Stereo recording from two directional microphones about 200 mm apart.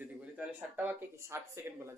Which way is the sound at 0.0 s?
5° right (ahead or behind).